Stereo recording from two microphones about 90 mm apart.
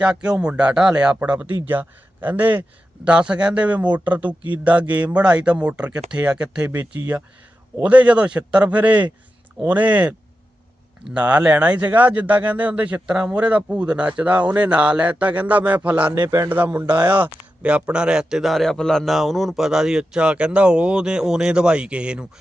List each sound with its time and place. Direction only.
0.0 s a man's voice: 10° right (ahead or behind)